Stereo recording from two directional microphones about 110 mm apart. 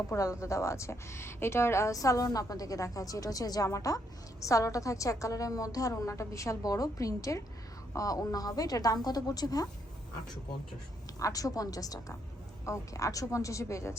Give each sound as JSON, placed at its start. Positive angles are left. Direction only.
{"t": 0.1, "sound": "a woman's voice", "side_deg": 30}
{"t": 11.2, "sound": "a woman's voice", "side_deg": 30}